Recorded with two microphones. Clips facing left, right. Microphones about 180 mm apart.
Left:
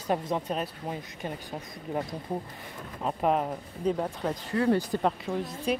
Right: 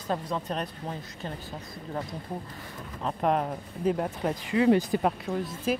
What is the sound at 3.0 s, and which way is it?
A woman's voice, 5° left (ahead or behind).